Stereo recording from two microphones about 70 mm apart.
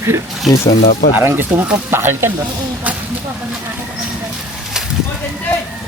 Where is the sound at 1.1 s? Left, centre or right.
Right.